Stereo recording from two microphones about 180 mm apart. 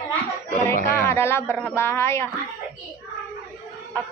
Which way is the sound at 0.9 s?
15° left (ahead or behind).